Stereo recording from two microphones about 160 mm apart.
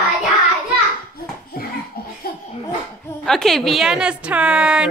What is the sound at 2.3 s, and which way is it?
Laughter, 70° left (ahead or behind).